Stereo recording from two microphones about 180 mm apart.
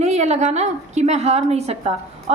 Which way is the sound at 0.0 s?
40° right (ahead or behind).